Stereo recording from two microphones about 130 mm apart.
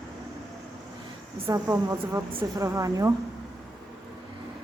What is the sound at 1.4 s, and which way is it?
A woman's voice, 25° right (ahead or behind).